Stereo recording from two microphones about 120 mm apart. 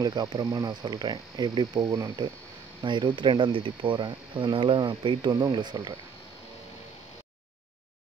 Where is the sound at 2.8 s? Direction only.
40° right (ahead or behind).